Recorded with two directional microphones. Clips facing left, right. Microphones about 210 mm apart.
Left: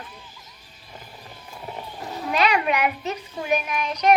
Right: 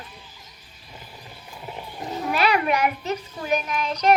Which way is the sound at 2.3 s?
20° left (ahead or behind).